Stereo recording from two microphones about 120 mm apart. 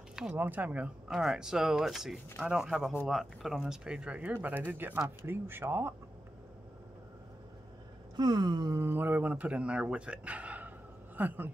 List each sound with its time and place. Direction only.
0.1 s a sound: 5° right (ahead or behind)
0.4 s speech: 15° right (ahead or behind)
8.2 s speech: 35° right (ahead or behind); by 11.5 s 15° right (ahead or behind)